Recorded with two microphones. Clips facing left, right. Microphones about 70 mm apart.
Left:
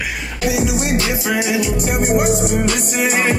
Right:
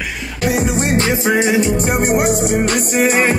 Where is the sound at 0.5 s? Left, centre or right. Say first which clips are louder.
Right 2 dB; right.